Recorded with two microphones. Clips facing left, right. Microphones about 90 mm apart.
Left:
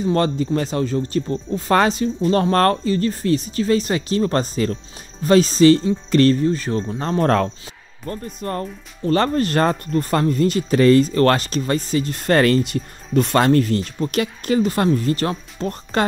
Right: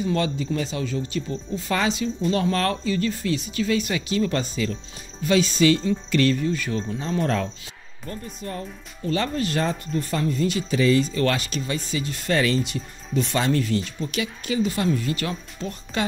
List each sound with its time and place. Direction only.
0.0 s speech: 45° left (ahead or behind)
7.0 s speech: 55° left (ahead or behind)